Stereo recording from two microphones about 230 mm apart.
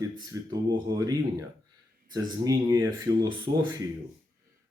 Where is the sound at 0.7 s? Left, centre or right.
Centre.